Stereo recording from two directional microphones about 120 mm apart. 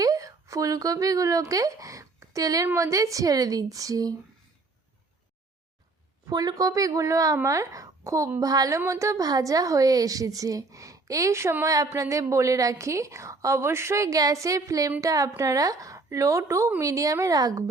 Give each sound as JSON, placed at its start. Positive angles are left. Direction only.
{"t": 0.0, "sound": "a woman's voice", "side_deg": -30}
{"t": 6.2, "sound": "a woman's voice", "side_deg": -30}